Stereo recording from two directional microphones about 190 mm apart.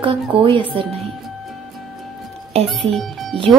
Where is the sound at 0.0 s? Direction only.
25° right (ahead or behind).